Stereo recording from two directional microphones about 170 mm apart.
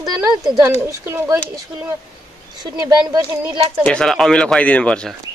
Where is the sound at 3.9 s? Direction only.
5° left (ahead or behind).